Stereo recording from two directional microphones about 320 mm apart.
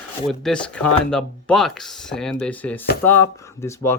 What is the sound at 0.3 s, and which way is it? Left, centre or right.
Speech, centre.